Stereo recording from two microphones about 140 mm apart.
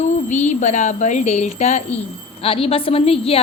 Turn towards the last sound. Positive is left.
turn(degrees=45)  # may be behind; listen again after turning